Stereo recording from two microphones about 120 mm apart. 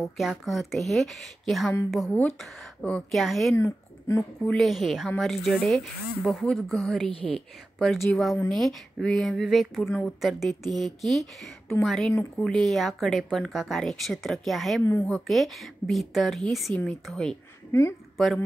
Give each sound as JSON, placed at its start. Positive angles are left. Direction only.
{"t": 0.2, "sound": "speech", "side_deg": 0}
{"t": 2.0, "sound": "a woman's voice", "side_deg": 15}
{"t": 3.1, "sound": "speech", "side_deg": 0}
{"t": 3.5, "sound": "speech", "side_deg": 20}
{"t": 4.5, "sound": "speech", "side_deg": 0}
{"t": 7.1, "sound": "a woman's voice", "side_deg": 50}
{"t": 7.3, "sound": "speech", "side_deg": 5}
{"t": 17.6, "sound": "a woman's voice", "side_deg": 20}
{"t": 18.1, "sound": "a woman's voice", "side_deg": 0}